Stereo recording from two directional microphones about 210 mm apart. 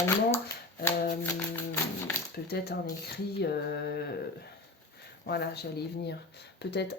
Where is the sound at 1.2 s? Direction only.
10° left (ahead or behind).